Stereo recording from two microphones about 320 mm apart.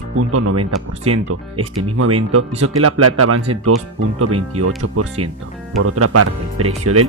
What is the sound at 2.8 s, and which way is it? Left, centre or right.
Speech, right.